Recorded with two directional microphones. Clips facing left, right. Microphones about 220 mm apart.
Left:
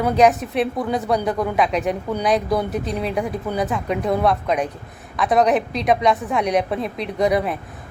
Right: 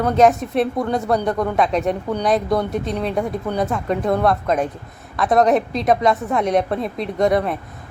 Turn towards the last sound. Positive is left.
turn(degrees=0)  # may be behind; listen again after turning